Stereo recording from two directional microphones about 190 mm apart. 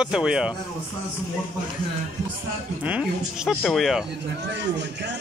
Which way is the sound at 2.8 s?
5° right (ahead or behind).